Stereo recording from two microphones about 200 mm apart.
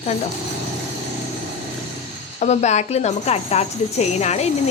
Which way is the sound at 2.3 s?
35° left (ahead or behind).